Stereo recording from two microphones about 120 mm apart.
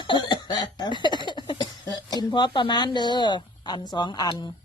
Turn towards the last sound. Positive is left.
turn(degrees=35)  # may be behind; listen again after turning